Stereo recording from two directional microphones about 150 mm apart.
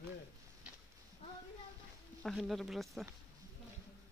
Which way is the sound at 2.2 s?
Centre (ahead or behind).